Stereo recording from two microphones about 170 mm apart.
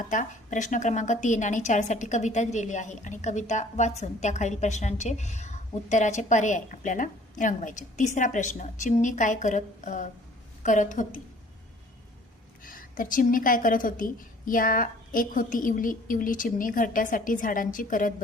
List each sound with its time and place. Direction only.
0.1 s a woman's voice: 50° left (ahead or behind)
12.6 s a woman's voice: 55° left (ahead or behind)